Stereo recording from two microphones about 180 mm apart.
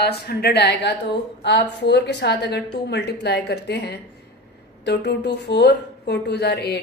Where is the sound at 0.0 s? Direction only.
60° left (ahead or behind).